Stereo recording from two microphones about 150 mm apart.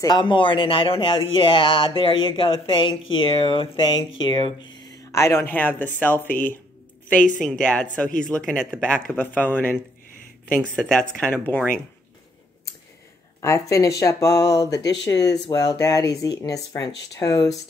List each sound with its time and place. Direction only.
0.0 s speech: 30° left (ahead or behind)
5.1 s speech: 20° left (ahead or behind)
6.2 s speech: 65° left (ahead or behind)
7.4 s speech: 5° left (ahead or behind)
13.4 s speech: 20° left (ahead or behind)